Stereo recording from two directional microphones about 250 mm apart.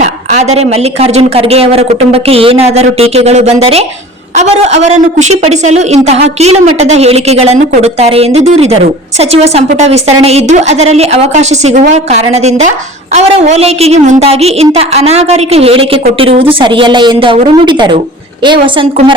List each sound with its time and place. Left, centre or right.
0.0 s a woman's voice: right